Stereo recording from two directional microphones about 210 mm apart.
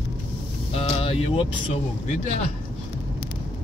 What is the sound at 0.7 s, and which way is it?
Vehicle, 25° left (ahead or behind).